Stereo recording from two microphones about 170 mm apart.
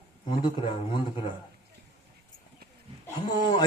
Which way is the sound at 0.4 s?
30° left (ahead or behind).